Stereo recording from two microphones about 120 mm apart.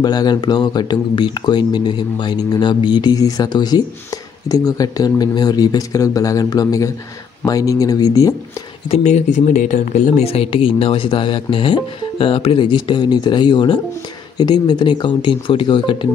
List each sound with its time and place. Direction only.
0.0 s speech: 35° left (ahead or behind)
8.9 s speech: 70° left (ahead or behind); by 16.1 s 45° left (ahead or behind)